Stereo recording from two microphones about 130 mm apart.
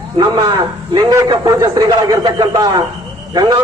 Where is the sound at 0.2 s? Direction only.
35° right (ahead or behind).